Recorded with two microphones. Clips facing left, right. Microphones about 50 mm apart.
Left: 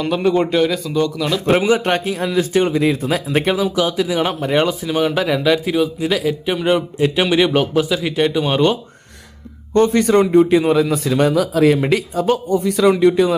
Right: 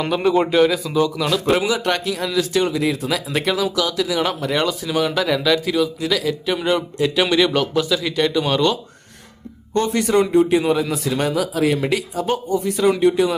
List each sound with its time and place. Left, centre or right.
0.1 s speech: centre
1.5 s a man's voice: left
9.7 s speech: left
12.2 s speech: left